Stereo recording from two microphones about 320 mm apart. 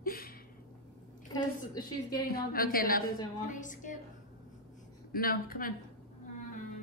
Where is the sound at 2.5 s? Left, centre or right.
Left.